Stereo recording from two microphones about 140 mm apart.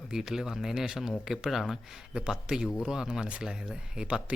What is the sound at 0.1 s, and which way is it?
Speech, 5° right (ahead or behind).